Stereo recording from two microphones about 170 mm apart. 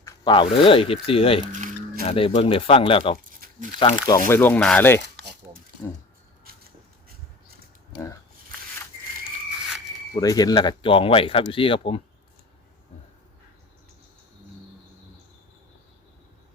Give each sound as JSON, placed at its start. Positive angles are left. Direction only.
{"t": 0.0, "sound": "speech", "side_deg": 30}
{"t": 4.3, "sound": "speech", "side_deg": 10}
{"t": 6.4, "sound": "a sound", "side_deg": -60}
{"t": 10.2, "sound": "speech", "side_deg": 20}